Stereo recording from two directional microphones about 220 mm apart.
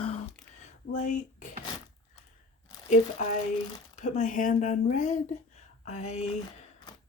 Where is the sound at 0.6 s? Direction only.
35° left (ahead or behind).